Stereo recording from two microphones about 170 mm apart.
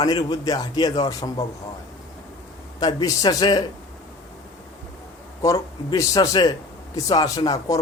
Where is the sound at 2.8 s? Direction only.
25° left (ahead or behind).